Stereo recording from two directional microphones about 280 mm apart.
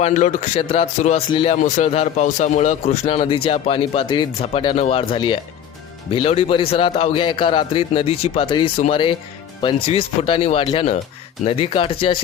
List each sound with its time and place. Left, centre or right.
0.0 s speech: left